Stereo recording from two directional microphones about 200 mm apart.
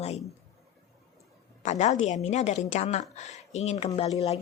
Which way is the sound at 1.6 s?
35° left (ahead or behind).